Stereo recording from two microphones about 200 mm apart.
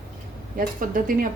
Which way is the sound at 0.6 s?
45° right (ahead or behind).